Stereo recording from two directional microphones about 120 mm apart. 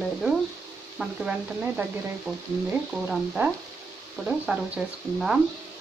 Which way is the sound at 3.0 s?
5° right (ahead or behind).